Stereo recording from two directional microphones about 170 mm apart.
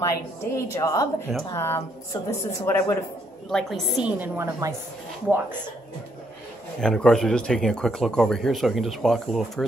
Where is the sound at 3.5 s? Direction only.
Centre (ahead or behind); by 4.7 s 15° right (ahead or behind).